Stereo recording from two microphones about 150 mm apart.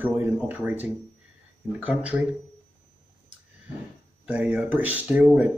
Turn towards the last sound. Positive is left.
turn(degrees=-10)  # may be behind; listen again after turning